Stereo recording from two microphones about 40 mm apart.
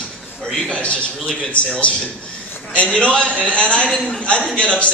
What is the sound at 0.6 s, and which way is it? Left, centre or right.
A man's voice, left.